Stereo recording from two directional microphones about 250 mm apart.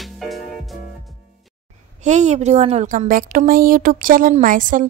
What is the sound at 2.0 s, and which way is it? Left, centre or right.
A woman's voice, right.